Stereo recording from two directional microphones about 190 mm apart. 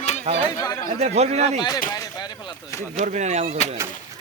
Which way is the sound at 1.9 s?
20° left (ahead or behind).